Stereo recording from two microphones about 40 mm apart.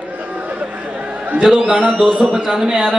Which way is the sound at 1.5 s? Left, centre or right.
Centre.